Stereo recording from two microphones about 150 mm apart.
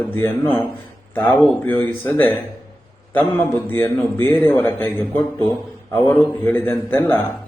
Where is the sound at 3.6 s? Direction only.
15° left (ahead or behind).